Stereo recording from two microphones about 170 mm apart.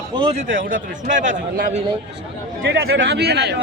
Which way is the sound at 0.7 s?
50° right (ahead or behind).